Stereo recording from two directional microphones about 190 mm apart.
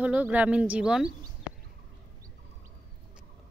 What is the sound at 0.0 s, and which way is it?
Speech, 5° right (ahead or behind).